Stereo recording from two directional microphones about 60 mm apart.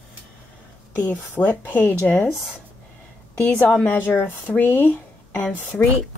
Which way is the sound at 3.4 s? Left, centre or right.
Left.